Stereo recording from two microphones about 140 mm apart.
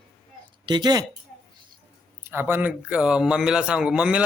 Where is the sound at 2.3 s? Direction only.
15° right (ahead or behind).